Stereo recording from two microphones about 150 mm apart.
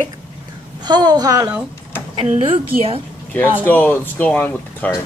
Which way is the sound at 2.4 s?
40° right (ahead or behind).